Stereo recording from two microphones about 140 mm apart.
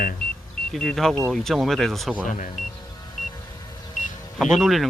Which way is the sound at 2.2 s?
65° left (ahead or behind).